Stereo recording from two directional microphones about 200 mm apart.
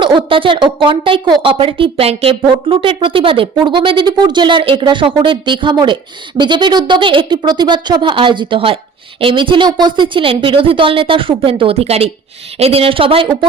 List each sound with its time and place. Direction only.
0.0 s a woman's voice: 25° right (ahead or behind)